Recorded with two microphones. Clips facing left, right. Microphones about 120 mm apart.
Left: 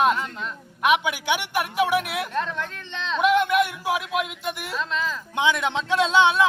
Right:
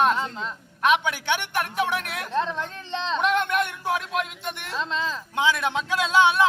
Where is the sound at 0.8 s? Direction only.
10° left (ahead or behind).